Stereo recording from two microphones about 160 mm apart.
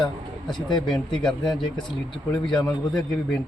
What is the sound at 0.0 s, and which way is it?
A man's voice, 5° left (ahead or behind).